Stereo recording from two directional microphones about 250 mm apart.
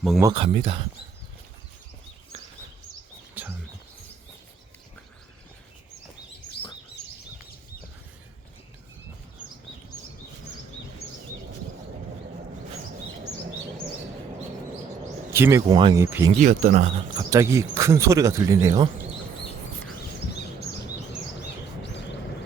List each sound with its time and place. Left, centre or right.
0.2 s speech: centre
3.4 s bird: centre
15.3 s speech: centre
16.4 s speech: right
17.2 s speech: centre